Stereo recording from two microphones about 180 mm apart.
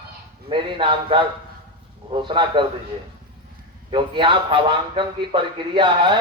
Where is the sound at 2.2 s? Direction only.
25° right (ahead or behind).